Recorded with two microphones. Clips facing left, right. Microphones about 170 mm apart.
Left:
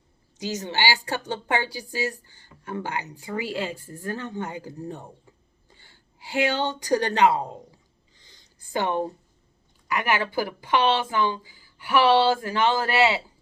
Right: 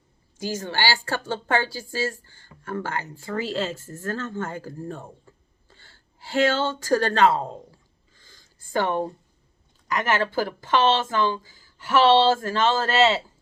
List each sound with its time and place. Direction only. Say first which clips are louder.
0.6 s speech: left 1 dB; 15° left (ahead or behind)
8.1 s a sound: right 2 dB; 20° left (ahead or behind)
8.7 s speech: right 1 dB; 15° left (ahead or behind)
10.1 s speech: right 2 dB; 15° left (ahead or behind)